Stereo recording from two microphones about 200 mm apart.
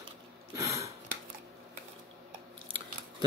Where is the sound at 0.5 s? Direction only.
15° right (ahead or behind).